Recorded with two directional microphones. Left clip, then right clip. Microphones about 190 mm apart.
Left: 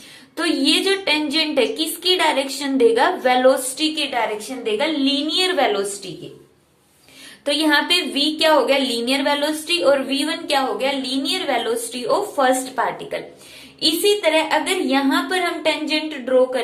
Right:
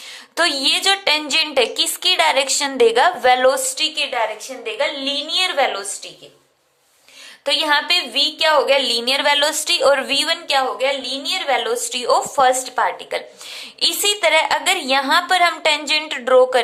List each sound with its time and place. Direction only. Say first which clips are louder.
0.3 s a woman's voice: right 2 dB; 45° right (ahead or behind); by 5.8 s 20° right (ahead or behind)
7.4 s a woman's voice: right 1 dB; 25° right (ahead or behind)
10.4 s a woman's voice: right 2 dB; 25° right (ahead or behind)
13.7 s a woman's voice: left 1 dB; 50° right (ahead or behind)